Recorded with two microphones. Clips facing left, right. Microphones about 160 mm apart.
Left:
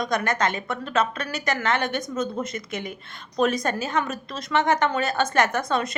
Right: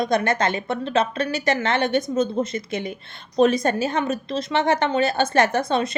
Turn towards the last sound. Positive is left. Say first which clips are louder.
# right 3 dB
turn(degrees=-30)  # may be behind; listen again after turning